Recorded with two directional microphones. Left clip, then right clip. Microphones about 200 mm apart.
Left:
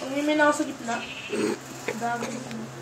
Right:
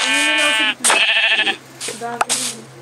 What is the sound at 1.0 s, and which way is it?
Sheep, 55° right (ahead or behind).